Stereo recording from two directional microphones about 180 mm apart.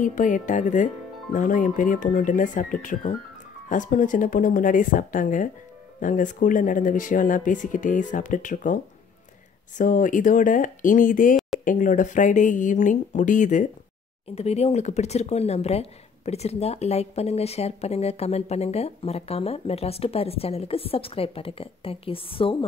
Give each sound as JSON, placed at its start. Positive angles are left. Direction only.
{"t": 0.0, "sound": "speech", "side_deg": 45}
{"t": 9.8, "sound": "speech", "side_deg": 45}